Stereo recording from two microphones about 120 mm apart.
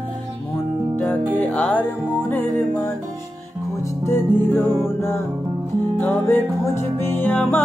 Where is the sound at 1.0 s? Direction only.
15° left (ahead or behind).